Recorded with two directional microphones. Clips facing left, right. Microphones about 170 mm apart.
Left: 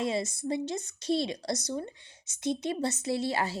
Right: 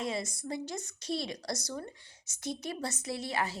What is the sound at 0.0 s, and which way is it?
A woman's voice, 25° left (ahead or behind).